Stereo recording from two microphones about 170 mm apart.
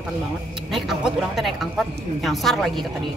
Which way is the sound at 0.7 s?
Centre (ahead or behind).